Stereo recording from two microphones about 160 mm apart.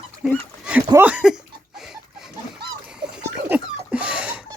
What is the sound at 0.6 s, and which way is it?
Speech, 10° right (ahead or behind).